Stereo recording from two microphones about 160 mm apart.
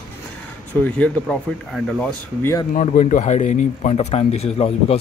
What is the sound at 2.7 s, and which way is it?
Speech, 50° left (ahead or behind).